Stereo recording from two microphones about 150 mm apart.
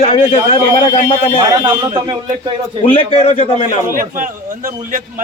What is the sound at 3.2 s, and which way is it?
Speech, 45° left (ahead or behind).